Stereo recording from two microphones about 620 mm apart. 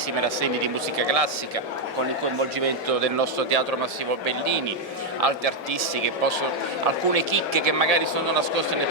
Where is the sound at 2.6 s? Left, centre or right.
Right.